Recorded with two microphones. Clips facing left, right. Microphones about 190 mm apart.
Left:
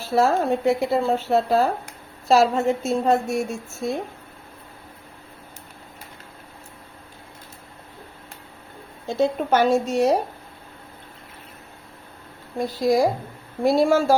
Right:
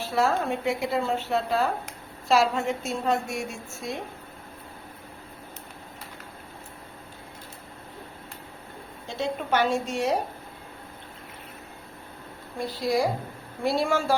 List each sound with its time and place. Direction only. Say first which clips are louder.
0.0 s speech: left 5 dB; 40° left (ahead or behind)
9.0 s a woman's voice: left 7 dB; 45° left (ahead or behind)
12.5 s a woman's voice: left 6 dB; 45° left (ahead or behind)